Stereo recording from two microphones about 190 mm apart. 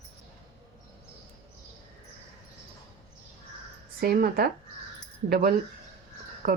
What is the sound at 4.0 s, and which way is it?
Speech, 55° right (ahead or behind).